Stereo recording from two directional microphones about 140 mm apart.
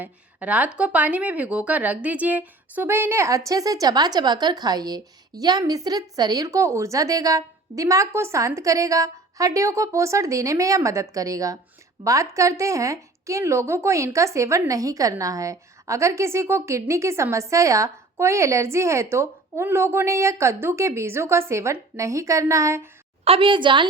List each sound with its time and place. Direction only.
0.0 s speech: 10° right (ahead or behind)
23.2 s a woman's voice: 40° right (ahead or behind)